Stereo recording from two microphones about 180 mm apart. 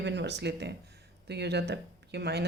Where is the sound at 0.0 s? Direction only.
70° right (ahead or behind).